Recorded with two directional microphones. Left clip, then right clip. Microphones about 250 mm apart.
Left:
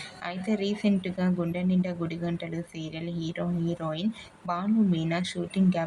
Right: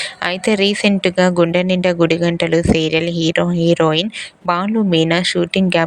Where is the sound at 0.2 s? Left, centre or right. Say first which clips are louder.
Right 15 dB; right.